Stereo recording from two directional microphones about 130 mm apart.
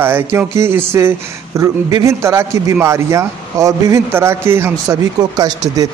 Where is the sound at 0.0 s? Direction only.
15° right (ahead or behind).